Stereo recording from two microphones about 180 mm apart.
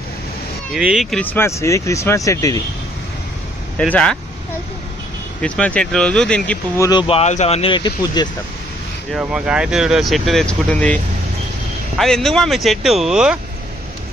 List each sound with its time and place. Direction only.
0.7 s speech: 5° right (ahead or behind)
1.2 s speech: 10° left (ahead or behind)
3.9 s speech: 5° left (ahead or behind)
5.4 s speech: 5° left (ahead or behind)
6.9 s speech: 30° left (ahead or behind)
9.1 s speech: 5° right (ahead or behind)
12.0 s speech: 5° left (ahead or behind)